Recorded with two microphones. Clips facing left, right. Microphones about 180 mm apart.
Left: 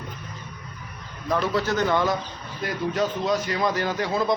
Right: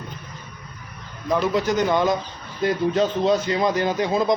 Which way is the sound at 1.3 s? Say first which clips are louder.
Right 3 dB; 15° right (ahead or behind).